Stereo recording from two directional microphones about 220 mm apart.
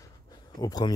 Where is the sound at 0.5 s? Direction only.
20° left (ahead or behind).